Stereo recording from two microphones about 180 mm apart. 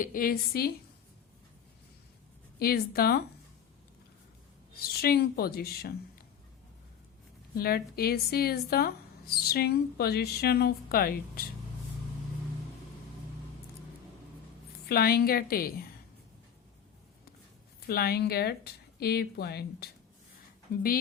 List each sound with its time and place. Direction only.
0.0 s a woman's voice: 50° left (ahead or behind)
2.6 s a woman's voice: 60° left (ahead or behind)
4.8 s a woman's voice: 60° left (ahead or behind)
7.5 s a woman's voice: 60° left (ahead or behind)
14.8 s a woman's voice: 60° left (ahead or behind)
17.8 s a woman's voice: 60° left (ahead or behind)